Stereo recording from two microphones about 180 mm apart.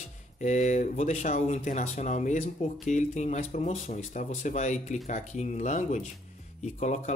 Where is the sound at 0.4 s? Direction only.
40° left (ahead or behind).